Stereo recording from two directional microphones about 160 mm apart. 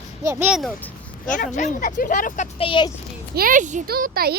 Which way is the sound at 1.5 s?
55° left (ahead or behind).